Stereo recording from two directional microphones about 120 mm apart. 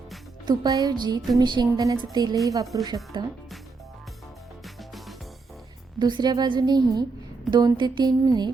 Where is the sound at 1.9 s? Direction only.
35° right (ahead or behind).